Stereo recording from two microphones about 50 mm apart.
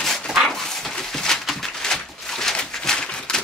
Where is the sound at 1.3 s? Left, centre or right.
Centre.